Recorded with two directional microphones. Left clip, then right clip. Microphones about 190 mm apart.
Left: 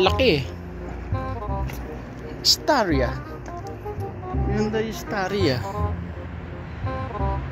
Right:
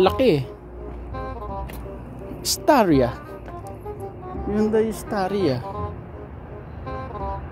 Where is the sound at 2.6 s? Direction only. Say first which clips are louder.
Right 4 dB; 55° right (ahead or behind).